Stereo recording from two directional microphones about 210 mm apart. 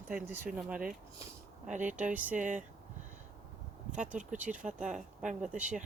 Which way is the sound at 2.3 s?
35° right (ahead or behind).